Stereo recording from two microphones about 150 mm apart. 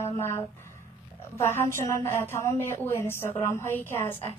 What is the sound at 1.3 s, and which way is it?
A woman's voice, 15° left (ahead or behind).